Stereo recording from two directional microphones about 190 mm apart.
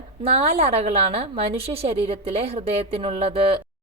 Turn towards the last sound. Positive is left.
turn(degrees=-30)  # may be behind; listen again after turning